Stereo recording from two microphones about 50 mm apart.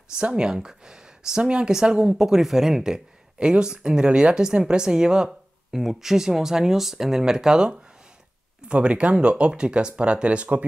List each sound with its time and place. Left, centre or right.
0.2 s speech: centre